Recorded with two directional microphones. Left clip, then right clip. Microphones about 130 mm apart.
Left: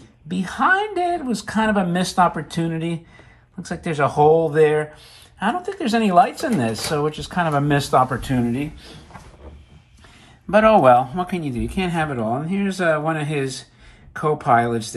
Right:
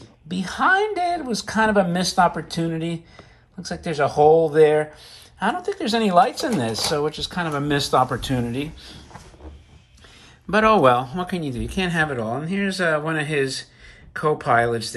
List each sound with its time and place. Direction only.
0.3 s speech: 5° right (ahead or behind)
10.5 s speech: 15° right (ahead or behind)